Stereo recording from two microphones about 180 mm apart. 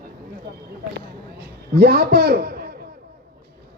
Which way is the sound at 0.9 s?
65° right (ahead or behind).